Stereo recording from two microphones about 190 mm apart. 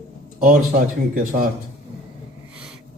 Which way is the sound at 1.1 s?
50° right (ahead or behind).